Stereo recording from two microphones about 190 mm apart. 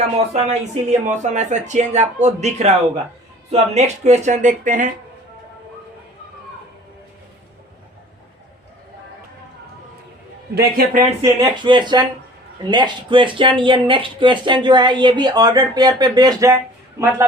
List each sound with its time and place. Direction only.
0.2 s speech: 35° right (ahead or behind)
10.5 s a man's voice: 50° right (ahead or behind)
11.2 s speech: 25° right (ahead or behind)